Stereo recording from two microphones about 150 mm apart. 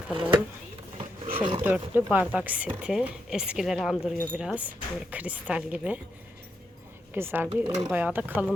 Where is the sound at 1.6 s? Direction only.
10° right (ahead or behind).